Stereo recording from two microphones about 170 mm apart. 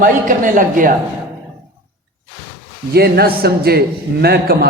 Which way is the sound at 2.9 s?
70° right (ahead or behind).